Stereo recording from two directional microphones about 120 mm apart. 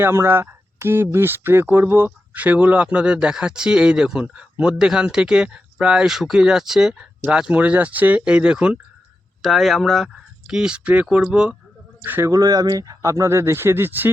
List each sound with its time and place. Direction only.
0.0 s speech: 20° right (ahead or behind)
12.3 s speech: 30° right (ahead or behind)